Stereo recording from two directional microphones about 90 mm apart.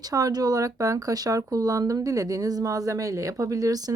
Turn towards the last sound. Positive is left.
turn(degrees=-40)  # may be behind; listen again after turning